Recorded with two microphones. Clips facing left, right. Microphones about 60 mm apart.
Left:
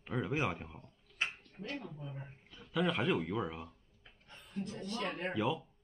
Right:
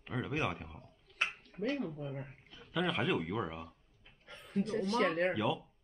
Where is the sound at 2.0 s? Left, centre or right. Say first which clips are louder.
Right 5 dB; right.